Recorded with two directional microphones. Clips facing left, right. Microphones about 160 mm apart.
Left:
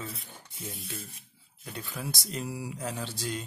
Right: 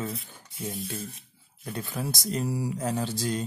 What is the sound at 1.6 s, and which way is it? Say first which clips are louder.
Speech: right 5 dB; 40° right (ahead or behind).